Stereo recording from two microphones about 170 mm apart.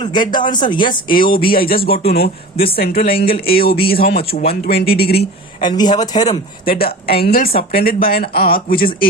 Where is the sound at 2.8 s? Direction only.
65° left (ahead or behind).